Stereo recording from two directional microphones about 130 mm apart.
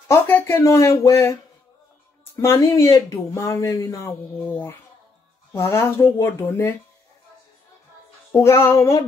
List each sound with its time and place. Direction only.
0.1 s speech: 20° left (ahead or behind)
2.3 s speech: 20° left (ahead or behind)
8.3 s speech: 20° left (ahead or behind)